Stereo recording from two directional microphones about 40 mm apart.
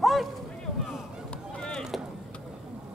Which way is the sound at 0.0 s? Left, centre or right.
Centre.